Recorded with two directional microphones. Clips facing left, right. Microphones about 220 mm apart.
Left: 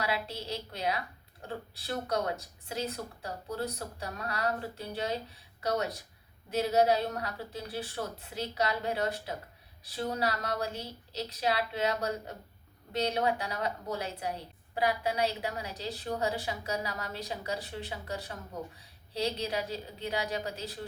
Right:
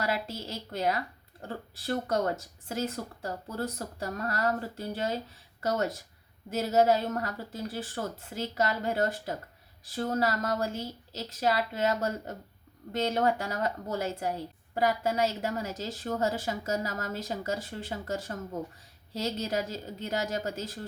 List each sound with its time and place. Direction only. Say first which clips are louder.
0.0 s a woman's voice: right 2 dB; 45° right (ahead or behind)